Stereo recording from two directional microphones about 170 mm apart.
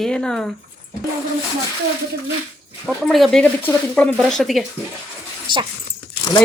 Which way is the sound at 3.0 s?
Centre (ahead or behind).